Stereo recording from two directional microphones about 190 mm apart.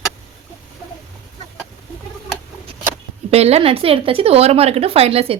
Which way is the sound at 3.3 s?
30° right (ahead or behind).